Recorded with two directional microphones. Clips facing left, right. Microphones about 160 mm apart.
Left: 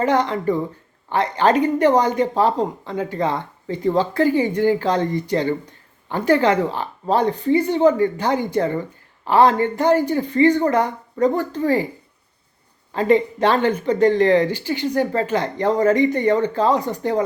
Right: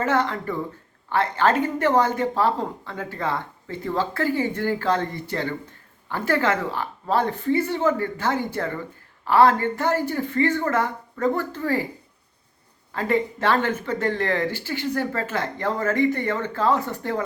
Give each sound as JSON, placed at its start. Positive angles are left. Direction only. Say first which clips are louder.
{"t": 0.0, "sound": "speech", "louder": "left 4 dB", "side_deg": 15}
{"t": 12.9, "sound": "speech", "louder": "left 6 dB", "side_deg": 20}